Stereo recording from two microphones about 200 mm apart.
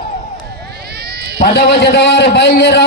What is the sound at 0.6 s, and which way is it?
Run, 55° right (ahead or behind).